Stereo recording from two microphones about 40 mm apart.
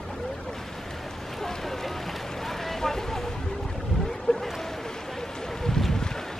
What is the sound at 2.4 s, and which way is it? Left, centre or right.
Boat, centre.